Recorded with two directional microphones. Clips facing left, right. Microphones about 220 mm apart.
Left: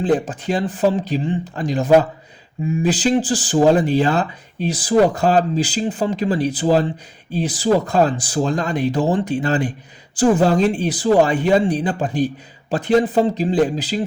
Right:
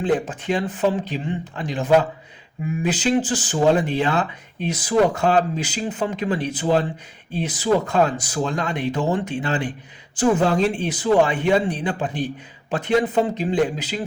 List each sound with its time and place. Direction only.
0.0 s speech: 35° left (ahead or behind)